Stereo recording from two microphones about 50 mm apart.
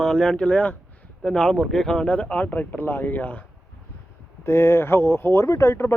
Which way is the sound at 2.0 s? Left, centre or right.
Left.